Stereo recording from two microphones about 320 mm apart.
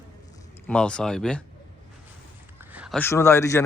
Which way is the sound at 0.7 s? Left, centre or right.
Centre.